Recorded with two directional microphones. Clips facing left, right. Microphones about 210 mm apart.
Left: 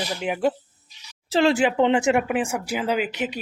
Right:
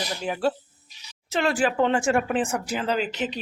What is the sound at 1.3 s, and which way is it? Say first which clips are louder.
Speech: left 4 dB; 25° left (ahead or behind).